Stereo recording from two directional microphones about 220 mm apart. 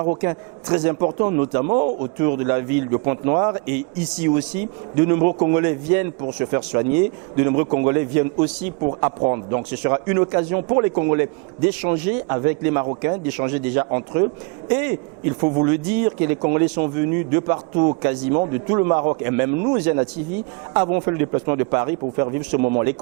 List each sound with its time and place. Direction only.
0.2 s speech: 15° right (ahead or behind)
9.2 s speech: 20° right (ahead or behind)